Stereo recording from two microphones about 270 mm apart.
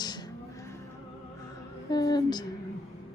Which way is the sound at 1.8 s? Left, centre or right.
Centre.